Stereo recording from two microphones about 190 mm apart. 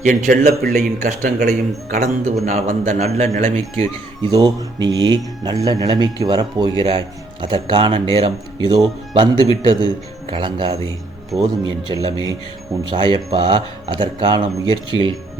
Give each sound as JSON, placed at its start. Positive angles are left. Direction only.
{"t": 0.0, "sound": "a man's voice", "side_deg": -40}
{"t": 4.3, "sound": "speech", "side_deg": -20}
{"t": 11.3, "sound": "speech", "side_deg": 0}
{"t": 11.9, "sound": "speech", "side_deg": -25}